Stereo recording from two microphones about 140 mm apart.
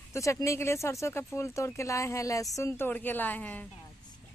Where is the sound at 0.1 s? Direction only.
20° left (ahead or behind).